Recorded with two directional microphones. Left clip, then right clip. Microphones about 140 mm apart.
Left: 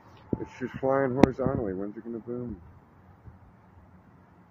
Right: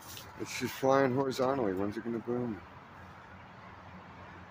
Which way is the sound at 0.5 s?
15° right (ahead or behind).